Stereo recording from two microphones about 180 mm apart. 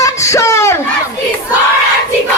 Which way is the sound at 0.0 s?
15° left (ahead or behind).